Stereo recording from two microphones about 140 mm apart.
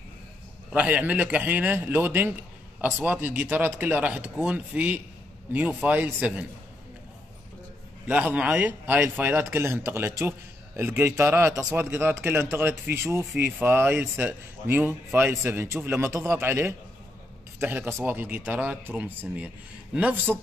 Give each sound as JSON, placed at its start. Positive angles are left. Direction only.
{"t": 0.7, "sound": "a man's voice", "side_deg": -10}
{"t": 8.1, "sound": "a man's voice", "side_deg": -10}